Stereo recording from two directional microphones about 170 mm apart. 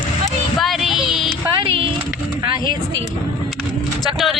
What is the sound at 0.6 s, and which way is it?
Music, centre (ahead or behind).